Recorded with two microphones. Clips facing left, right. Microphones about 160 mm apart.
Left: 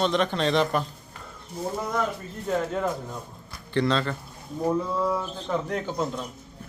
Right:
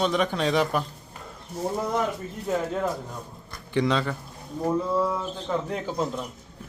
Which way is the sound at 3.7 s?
15° right (ahead or behind).